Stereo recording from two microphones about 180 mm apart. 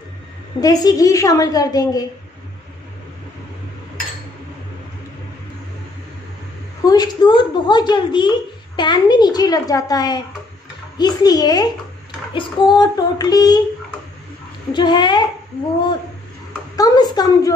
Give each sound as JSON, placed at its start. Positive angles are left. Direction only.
{"t": 0.6, "sound": "a woman's voice", "side_deg": 20}
{"t": 6.8, "sound": "a woman's voice", "side_deg": 20}
{"t": 14.7, "sound": "a woman's voice", "side_deg": 25}
{"t": 16.7, "sound": "a woman's voice", "side_deg": 20}